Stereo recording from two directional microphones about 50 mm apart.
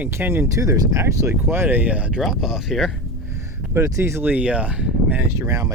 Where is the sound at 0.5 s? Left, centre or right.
Right.